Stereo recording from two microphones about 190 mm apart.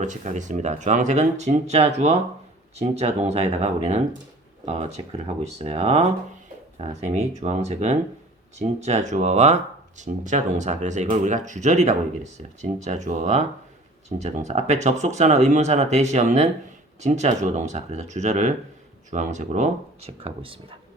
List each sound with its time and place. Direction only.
0.0 s speech: 40° right (ahead or behind)